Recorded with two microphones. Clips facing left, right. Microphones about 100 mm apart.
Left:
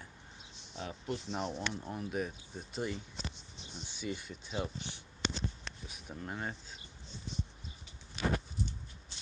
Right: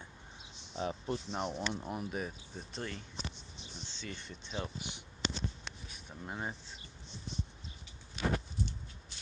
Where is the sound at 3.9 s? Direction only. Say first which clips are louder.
Left 6 dB; 15° left (ahead or behind).